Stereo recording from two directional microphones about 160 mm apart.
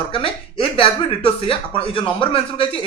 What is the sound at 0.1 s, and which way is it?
Speech, 35° left (ahead or behind).